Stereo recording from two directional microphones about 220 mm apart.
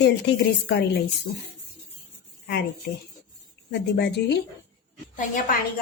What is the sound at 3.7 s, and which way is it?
Speech, 50° left (ahead or behind).